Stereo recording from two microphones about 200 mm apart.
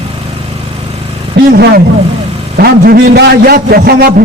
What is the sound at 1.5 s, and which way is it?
A man's voice, 50° right (ahead or behind).